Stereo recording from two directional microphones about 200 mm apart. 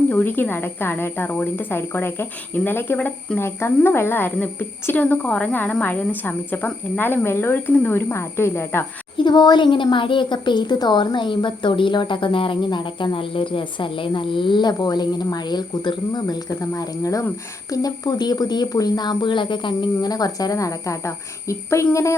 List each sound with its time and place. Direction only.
0.1 s speech: 10° left (ahead or behind)